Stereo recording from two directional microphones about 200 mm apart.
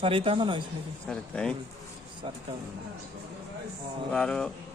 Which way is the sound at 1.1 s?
5° left (ahead or behind).